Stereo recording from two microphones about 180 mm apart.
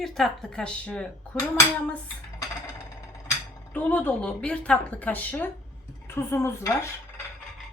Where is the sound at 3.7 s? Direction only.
10° left (ahead or behind).